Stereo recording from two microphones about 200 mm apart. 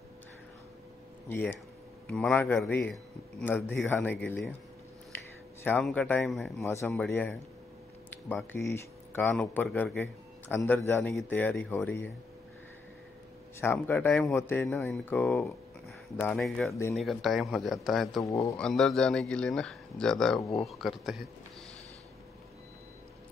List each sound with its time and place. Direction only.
1.3 s speech: 10° left (ahead or behind)
5.6 s speech: 5° left (ahead or behind)
6.6 s speech: 15° left (ahead or behind)
13.6 s speech: 10° left (ahead or behind)
18.2 s speech: 15° left (ahead or behind)
18.6 s speech: centre (ahead or behind)